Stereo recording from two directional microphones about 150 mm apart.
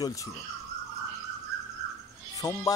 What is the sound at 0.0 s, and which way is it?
Speech, 20° left (ahead or behind).